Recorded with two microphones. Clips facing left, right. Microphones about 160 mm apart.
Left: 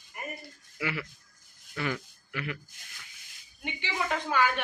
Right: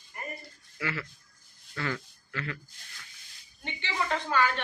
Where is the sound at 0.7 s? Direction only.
15° left (ahead or behind).